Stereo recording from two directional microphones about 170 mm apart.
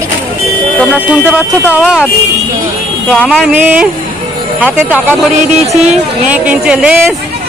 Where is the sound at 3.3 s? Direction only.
5° right (ahead or behind).